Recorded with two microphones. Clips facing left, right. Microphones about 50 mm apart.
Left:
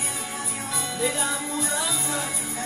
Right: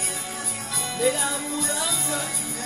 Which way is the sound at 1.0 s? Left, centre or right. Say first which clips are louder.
Right 4 dB; centre.